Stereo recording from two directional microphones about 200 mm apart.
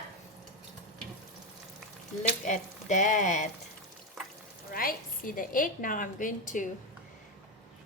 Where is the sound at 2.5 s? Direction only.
40° left (ahead or behind).